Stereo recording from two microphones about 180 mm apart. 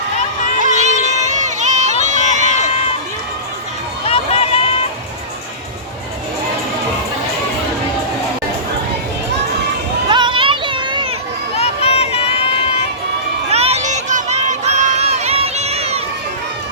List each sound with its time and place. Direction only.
0.6 s crowd: 40° right (ahead or behind)
4.0 s run: 30° left (ahead or behind)
10.1 s a sound: 25° right (ahead or behind)
11.5 s run: 35° left (ahead or behind)
13.5 s crowd: 35° right (ahead or behind)